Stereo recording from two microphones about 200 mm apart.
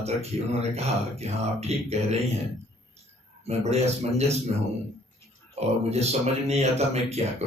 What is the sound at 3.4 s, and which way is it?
Speech, 35° right (ahead or behind).